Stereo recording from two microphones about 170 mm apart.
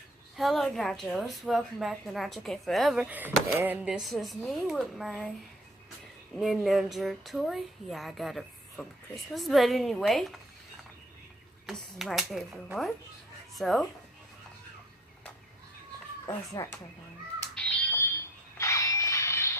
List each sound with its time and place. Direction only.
0.3 s a woman's voice: centre (ahead or behind)
6.3 s a woman's voice: centre (ahead or behind)
11.6 s a woman's voice: centre (ahead or behind)
13.6 s a woman's voice: centre (ahead or behind)
16.2 s a child's voice: 15° left (ahead or behind)
17.4 s music: 10° left (ahead or behind)
18.5 s a sound: 20° left (ahead or behind)